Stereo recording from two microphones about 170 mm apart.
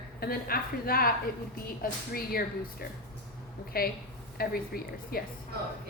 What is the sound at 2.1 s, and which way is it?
A woman's voice, 60° left (ahead or behind).